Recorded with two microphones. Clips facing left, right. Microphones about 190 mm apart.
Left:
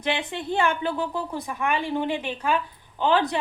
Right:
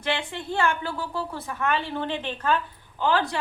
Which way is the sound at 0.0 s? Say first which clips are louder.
Left 2 dB; 20° left (ahead or behind).